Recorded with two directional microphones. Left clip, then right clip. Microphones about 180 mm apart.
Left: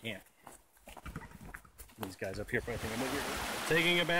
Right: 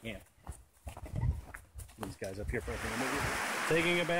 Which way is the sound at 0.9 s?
35° right (ahead or behind).